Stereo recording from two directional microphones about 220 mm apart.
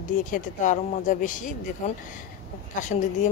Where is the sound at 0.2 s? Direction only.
35° left (ahead or behind).